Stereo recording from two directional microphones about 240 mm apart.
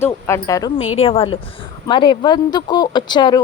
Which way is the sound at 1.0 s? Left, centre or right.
Left.